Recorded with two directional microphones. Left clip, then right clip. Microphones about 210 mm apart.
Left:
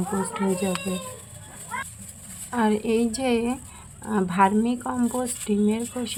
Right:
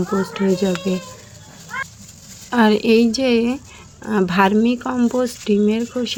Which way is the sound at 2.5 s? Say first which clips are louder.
Right 9 dB; 25° right (ahead or behind).